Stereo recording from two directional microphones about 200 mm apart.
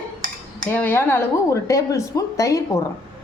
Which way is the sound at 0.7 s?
10° left (ahead or behind).